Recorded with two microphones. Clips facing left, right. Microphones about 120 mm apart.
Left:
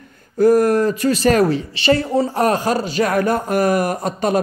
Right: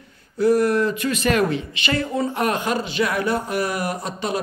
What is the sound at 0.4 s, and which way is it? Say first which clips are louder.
Speech: left 4 dB; 45° left (ahead or behind).